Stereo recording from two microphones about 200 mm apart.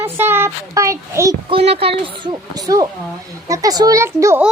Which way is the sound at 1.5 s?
30° right (ahead or behind).